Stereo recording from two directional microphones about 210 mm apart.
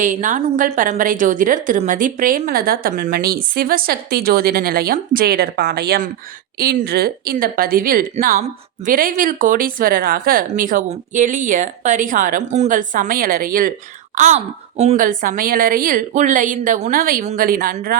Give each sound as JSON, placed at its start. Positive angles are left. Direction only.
{"t": 0.0, "sound": "a woman's voice", "side_deg": -35}